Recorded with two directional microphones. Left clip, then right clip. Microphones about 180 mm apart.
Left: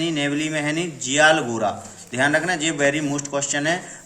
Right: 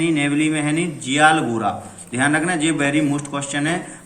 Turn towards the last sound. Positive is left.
turn(degrees=40)  # may be behind; listen again after turning